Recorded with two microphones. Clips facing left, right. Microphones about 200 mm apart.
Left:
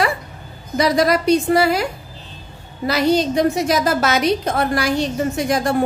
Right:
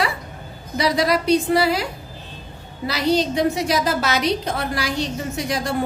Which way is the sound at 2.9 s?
45° left (ahead or behind).